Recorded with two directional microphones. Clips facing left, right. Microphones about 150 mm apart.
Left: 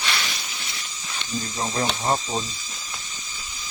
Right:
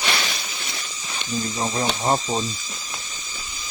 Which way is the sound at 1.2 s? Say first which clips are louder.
Right 3 dB; 15° right (ahead or behind).